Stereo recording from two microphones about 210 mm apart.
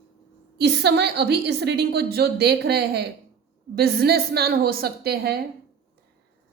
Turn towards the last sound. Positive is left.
turn(degrees=-45)  # may be behind; listen again after turning